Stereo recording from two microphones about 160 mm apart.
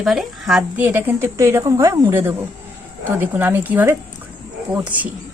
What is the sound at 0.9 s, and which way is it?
A woman's voice, 15° right (ahead or behind).